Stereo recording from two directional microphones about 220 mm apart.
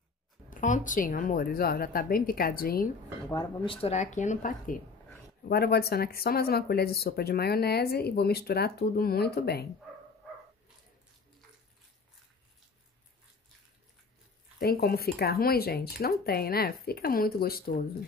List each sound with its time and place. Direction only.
0.5 s speech: 35° left (ahead or behind)
3.3 s speech: 20° left (ahead or behind); by 9.7 s 45° left (ahead or behind)
14.6 s speech: 45° left (ahead or behind)